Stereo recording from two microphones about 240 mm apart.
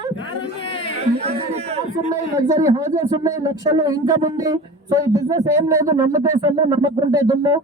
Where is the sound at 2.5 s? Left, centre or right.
Centre.